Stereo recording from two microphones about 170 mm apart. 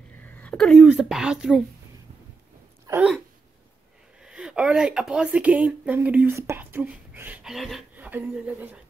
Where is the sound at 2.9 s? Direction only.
5° right (ahead or behind).